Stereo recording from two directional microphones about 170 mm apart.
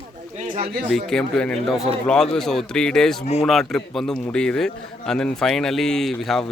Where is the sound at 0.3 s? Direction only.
50° right (ahead or behind).